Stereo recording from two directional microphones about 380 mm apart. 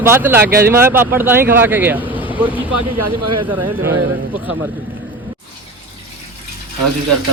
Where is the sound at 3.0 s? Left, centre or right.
Right.